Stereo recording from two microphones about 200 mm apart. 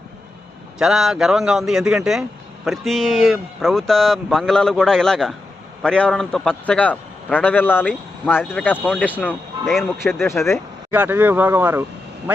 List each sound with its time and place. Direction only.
0.8 s speech: centre (ahead or behind)
10.2 s speech: 15° left (ahead or behind)
10.5 s speech: 10° right (ahead or behind)